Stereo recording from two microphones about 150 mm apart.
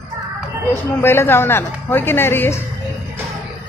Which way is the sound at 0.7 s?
15° left (ahead or behind).